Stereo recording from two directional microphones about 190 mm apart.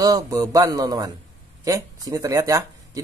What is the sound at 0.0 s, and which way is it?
A man's voice, 20° right (ahead or behind).